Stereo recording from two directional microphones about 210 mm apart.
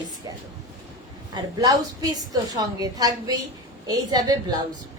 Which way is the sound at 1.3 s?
20° right (ahead or behind).